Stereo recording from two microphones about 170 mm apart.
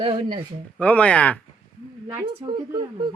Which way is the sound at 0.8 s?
10° left (ahead or behind).